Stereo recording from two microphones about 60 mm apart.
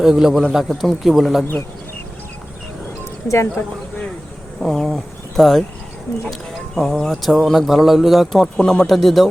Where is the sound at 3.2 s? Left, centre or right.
Left.